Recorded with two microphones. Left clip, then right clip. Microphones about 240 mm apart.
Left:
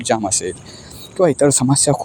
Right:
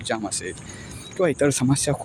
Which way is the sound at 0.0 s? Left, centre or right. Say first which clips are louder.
Left 9 dB; left.